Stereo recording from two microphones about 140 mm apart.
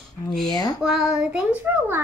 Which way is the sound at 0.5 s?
25° left (ahead or behind).